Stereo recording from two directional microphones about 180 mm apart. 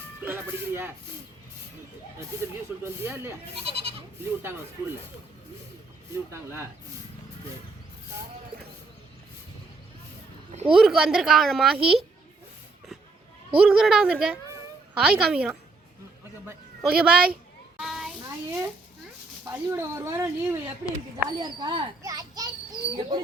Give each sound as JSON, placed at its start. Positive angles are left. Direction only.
{"t": 0.3, "sound": "speech", "side_deg": -15}
{"t": 2.4, "sound": "speech", "side_deg": -15}
{"t": 3.6, "sound": "goat", "side_deg": -30}
{"t": 4.4, "sound": "speech", "side_deg": -15}
{"t": 6.3, "sound": "speech", "side_deg": -15}
{"t": 10.5, "sound": "a sound", "side_deg": -35}
{"t": 10.8, "sound": "a woman's voice", "side_deg": 0}
{"t": 13.6, "sound": "a woman's voice", "side_deg": -5}
{"t": 16.8, "sound": "a woman's voice", "side_deg": -5}
{"t": 17.7, "sound": "a sound", "side_deg": 0}
{"t": 18.2, "sound": "speech", "side_deg": -15}
{"t": 22.0, "sound": "children playing", "side_deg": -20}